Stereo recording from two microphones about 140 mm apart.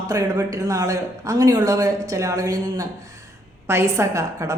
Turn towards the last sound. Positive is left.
turn(degrees=-20)  # may be behind; listen again after turning